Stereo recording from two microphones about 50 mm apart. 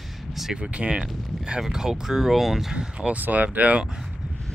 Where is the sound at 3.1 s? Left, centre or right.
Right.